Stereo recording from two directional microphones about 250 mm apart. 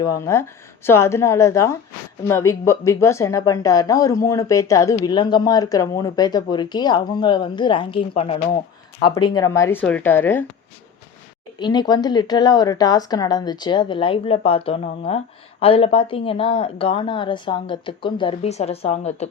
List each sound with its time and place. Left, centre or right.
0.0 s a woman's voice: centre
11.6 s a woman's voice: centre